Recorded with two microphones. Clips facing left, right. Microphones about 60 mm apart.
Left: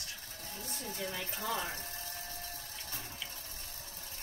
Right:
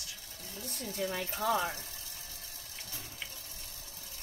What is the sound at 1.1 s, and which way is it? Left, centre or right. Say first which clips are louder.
Speech: right 7 dB; right.